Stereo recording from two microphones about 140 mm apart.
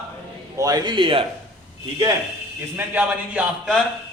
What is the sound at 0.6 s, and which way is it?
Speech, 25° right (ahead or behind).